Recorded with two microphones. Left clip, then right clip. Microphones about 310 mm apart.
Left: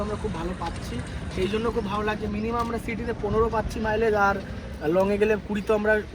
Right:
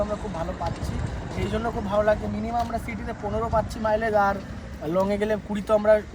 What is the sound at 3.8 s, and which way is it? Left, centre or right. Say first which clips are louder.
Speech: left 1 dB; right.